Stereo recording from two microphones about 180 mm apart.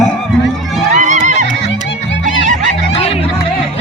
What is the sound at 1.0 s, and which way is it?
Neigh, 40° right (ahead or behind).